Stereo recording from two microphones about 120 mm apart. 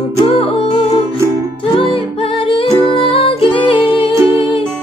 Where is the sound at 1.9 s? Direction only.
50° left (ahead or behind).